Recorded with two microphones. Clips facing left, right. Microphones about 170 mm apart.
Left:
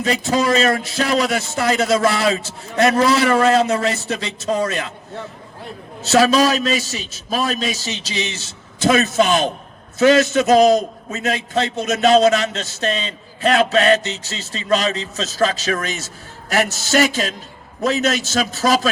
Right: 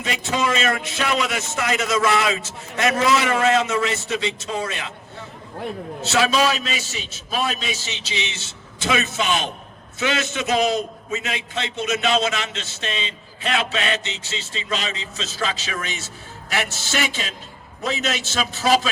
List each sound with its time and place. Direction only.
0.0 s a man's voice: 35° left (ahead or behind)
6.0 s a man's voice: 40° left (ahead or behind)